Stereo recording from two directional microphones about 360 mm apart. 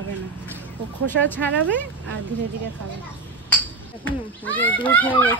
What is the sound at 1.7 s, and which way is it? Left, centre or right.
Speech, right.